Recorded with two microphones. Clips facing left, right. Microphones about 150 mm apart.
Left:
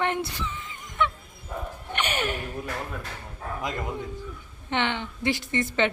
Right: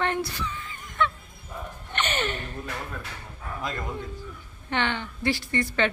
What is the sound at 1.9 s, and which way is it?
A woman's voice, 10° left (ahead or behind).